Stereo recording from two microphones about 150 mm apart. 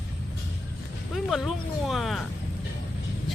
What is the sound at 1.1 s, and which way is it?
Speech, centre (ahead or behind).